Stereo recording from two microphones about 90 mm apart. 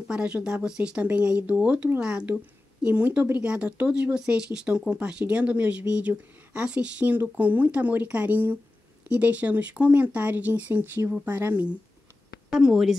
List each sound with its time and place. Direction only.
0.1 s speech: 10° right (ahead or behind)
12.4 s a woman's voice: 5° right (ahead or behind)